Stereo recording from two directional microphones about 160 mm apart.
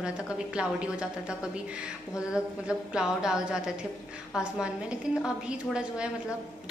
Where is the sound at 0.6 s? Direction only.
5° right (ahead or behind).